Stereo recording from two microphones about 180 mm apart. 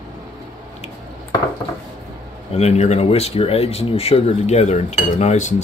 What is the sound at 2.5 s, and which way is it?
Speech, 35° left (ahead or behind).